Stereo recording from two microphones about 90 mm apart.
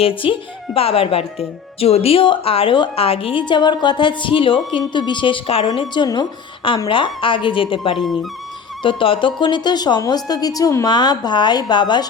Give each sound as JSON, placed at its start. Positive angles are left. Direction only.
{"t": 0.0, "sound": "speech", "side_deg": 80}
{"t": 6.0, "sound": "speech", "side_deg": 60}
{"t": 6.8, "sound": "speech", "side_deg": 75}
{"t": 7.9, "sound": "speech", "side_deg": 0}
{"t": 8.8, "sound": "speech", "side_deg": 70}
{"t": 10.8, "sound": "speech", "side_deg": 50}